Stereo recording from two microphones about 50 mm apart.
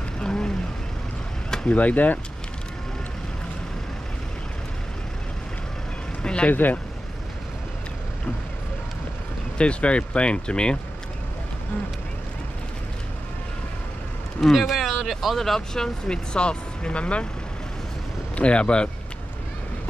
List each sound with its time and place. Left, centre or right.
0.2 s vehicle: centre
1.7 s speech: left
6.2 s vehicle: centre
6.5 s speech: left
9.6 s speech: left
14.4 s speech: centre; by 17.3 s left
18.3 s speech: left